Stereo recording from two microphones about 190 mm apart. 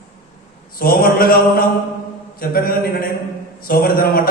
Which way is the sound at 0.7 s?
50° left (ahead or behind).